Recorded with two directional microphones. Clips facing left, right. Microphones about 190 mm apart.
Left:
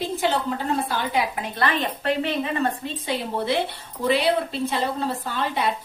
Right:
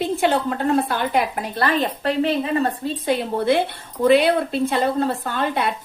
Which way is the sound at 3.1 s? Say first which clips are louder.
Right 6 dB; 55° right (ahead or behind).